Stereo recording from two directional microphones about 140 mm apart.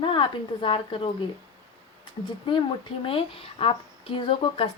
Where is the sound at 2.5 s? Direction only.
35° left (ahead or behind).